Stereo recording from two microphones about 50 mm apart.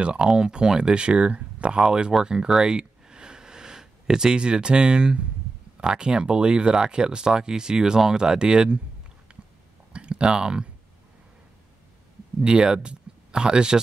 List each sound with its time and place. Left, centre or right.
0.0 s speech: centre
9.3 s a sound: centre
9.9 s speech: right
12.4 s speech: centre